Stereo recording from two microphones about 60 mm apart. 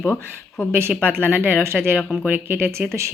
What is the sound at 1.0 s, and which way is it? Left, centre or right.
A woman's voice, right.